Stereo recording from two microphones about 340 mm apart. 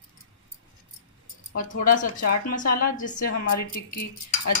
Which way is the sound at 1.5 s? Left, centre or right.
Left.